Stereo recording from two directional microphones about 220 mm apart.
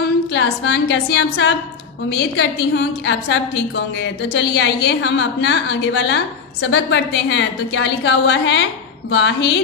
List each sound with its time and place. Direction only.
0.3 s a woman's voice: 55° left (ahead or behind)